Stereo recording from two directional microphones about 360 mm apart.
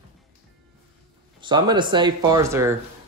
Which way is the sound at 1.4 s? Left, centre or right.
Centre.